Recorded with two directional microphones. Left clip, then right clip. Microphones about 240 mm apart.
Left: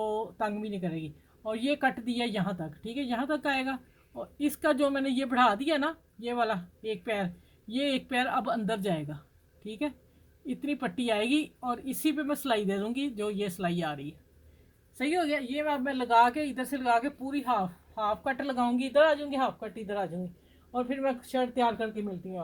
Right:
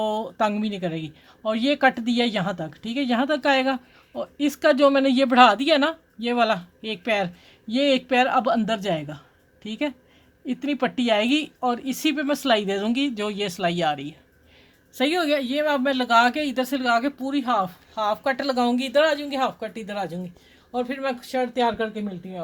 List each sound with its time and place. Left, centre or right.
0.0 s speech: right
14.9 s speech: right